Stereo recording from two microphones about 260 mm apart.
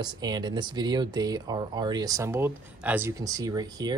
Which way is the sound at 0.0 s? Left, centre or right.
Centre.